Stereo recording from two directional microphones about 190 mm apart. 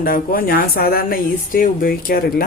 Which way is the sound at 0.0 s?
50° left (ahead or behind).